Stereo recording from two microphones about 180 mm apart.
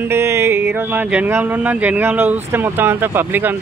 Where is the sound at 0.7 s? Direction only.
10° right (ahead or behind).